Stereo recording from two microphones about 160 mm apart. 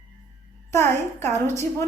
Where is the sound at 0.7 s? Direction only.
15° left (ahead or behind).